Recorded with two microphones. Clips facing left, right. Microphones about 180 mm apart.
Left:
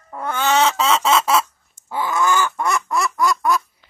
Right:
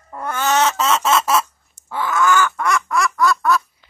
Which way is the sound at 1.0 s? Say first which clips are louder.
Even; centre (ahead or behind).